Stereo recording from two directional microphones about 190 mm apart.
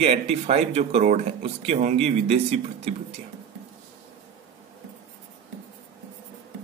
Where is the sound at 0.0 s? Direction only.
35° right (ahead or behind).